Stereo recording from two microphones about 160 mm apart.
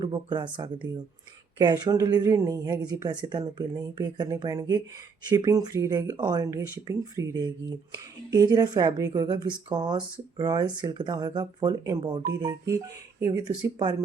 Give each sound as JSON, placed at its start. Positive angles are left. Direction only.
{"t": 0.0, "sound": "speech", "side_deg": -30}